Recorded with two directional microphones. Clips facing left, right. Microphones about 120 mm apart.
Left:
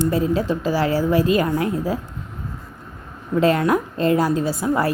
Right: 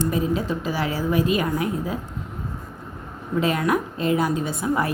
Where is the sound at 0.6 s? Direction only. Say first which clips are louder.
Left 5 dB; 30° left (ahead or behind).